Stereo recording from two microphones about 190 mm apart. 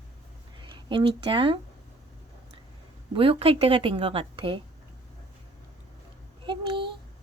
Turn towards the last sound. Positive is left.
turn(degrees=-25)  # may be behind; listen again after turning